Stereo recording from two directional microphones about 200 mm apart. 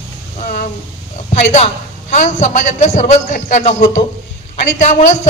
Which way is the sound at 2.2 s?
35° left (ahead or behind).